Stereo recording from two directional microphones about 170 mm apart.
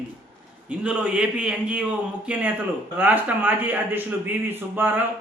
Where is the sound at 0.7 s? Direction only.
5° right (ahead or behind).